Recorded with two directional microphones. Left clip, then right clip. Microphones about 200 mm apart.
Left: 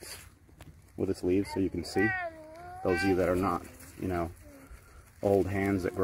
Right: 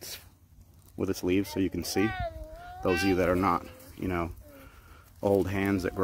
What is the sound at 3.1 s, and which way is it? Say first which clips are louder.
Speech: right 3 dB; 15° right (ahead or behind).